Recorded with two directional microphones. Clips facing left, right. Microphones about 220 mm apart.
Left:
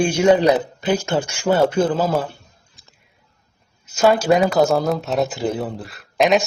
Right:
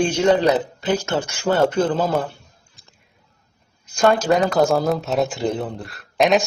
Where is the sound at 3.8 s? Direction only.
5° left (ahead or behind).